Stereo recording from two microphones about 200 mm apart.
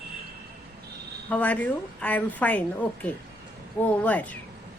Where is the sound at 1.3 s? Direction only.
5° left (ahead or behind).